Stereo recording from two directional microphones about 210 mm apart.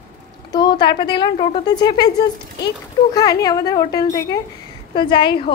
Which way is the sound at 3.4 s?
15° left (ahead or behind).